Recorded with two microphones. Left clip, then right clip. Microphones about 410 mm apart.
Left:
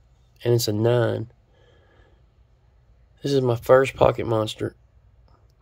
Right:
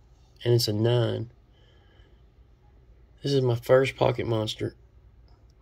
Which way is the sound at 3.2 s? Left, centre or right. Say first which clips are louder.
Left 4 dB; centre.